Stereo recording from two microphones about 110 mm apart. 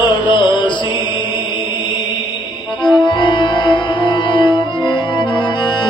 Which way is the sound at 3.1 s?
45° left (ahead or behind).